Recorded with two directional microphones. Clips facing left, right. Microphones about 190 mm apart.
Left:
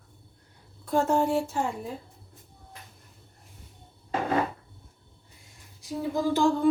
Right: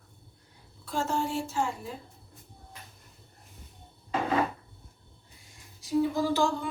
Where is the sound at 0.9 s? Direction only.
60° left (ahead or behind).